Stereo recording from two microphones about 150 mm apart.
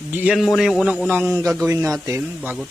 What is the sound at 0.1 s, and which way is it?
Speech, 10° right (ahead or behind).